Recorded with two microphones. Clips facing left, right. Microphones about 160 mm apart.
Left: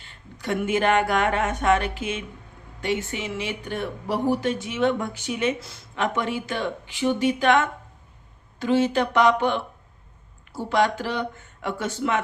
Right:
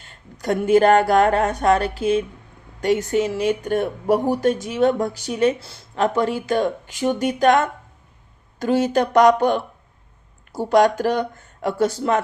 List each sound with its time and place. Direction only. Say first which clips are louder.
0.0 s speech: right 6 dB; 40° right (ahead or behind)